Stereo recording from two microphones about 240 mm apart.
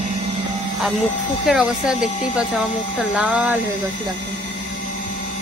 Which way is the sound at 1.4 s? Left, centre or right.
Centre.